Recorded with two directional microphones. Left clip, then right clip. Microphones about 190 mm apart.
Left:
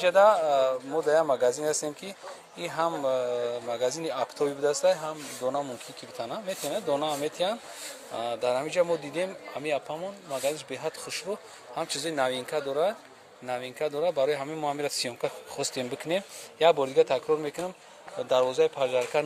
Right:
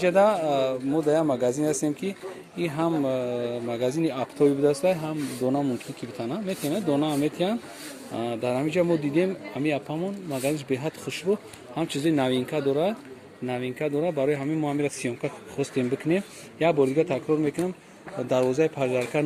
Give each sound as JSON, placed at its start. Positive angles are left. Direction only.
{"t": 0.0, "sound": "speech", "side_deg": 0}
{"t": 6.1, "sound": "speech", "side_deg": 10}
{"t": 13.5, "sound": "speech", "side_deg": 15}